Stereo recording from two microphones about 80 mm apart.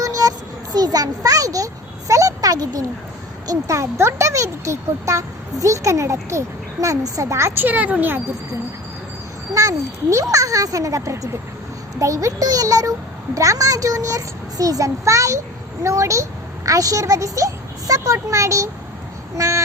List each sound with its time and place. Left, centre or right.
0.0 s a sound: right
3.4 s speech: right
7.5 s speech: right
9.5 s a child's voice: right
19.4 s vehicle: right